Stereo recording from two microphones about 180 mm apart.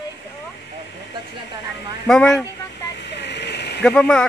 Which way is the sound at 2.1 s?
5° left (ahead or behind).